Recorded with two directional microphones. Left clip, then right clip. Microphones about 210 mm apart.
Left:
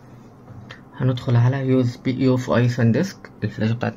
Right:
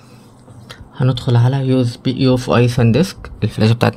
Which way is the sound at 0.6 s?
50° right (ahead or behind).